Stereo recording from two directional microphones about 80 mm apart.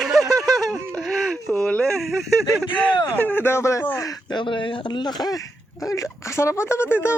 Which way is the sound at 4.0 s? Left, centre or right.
Left.